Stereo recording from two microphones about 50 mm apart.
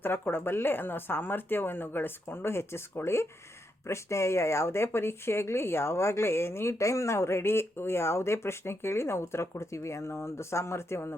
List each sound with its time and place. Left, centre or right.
0.0 s speech: left